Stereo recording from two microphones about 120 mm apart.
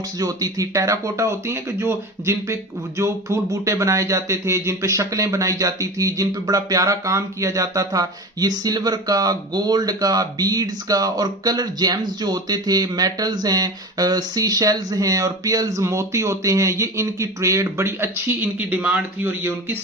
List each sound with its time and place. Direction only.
0.2 s speech: 30° right (ahead or behind)